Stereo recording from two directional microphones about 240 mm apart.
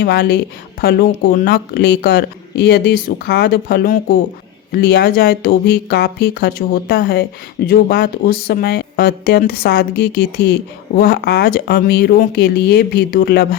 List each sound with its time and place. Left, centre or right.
0.0 s speech: left